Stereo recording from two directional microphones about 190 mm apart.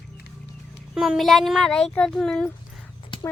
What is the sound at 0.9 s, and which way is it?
A child's voice, centre (ahead or behind).